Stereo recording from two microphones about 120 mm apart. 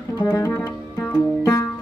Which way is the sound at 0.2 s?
20° left (ahead or behind).